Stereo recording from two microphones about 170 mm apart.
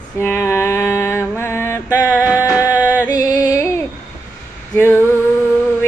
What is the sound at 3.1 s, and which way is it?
Music, 20° left (ahead or behind).